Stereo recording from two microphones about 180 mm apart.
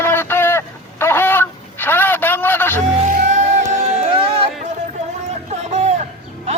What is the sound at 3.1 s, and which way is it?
Music, 45° right (ahead or behind).